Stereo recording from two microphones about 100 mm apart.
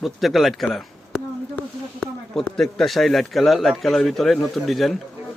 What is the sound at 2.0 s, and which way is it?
A man's voice, 5° left (ahead or behind).